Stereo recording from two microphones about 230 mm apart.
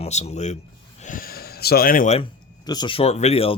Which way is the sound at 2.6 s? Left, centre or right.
Centre.